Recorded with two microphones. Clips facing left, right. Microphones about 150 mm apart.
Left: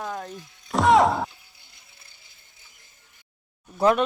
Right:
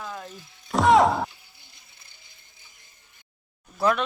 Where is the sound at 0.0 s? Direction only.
40° left (ahead or behind).